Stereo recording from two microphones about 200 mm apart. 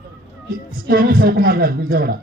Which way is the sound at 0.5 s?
45° right (ahead or behind).